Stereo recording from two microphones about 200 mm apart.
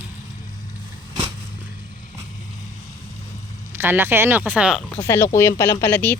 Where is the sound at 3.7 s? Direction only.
10° right (ahead or behind).